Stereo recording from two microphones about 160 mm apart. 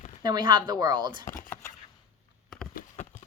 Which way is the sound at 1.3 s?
55° left (ahead or behind).